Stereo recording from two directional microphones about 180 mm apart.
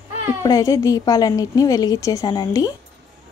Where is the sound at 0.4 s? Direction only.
20° left (ahead or behind).